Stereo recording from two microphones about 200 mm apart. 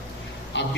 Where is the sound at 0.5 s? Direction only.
65° left (ahead or behind).